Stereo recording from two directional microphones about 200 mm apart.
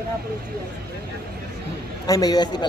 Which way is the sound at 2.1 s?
20° left (ahead or behind).